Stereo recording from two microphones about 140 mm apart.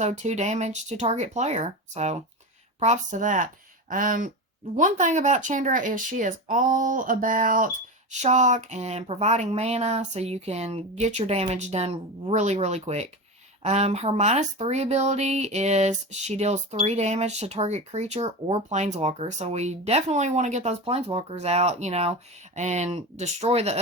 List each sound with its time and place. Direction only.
0.0 s speech: 55° right (ahead or behind); by 4.3 s 70° right (ahead or behind)
4.8 s speech: 60° right (ahead or behind)
8.1 s speech: 55° right (ahead or behind)